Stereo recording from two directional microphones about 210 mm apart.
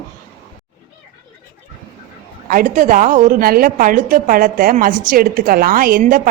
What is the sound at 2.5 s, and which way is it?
A woman's voice, 40° right (ahead or behind).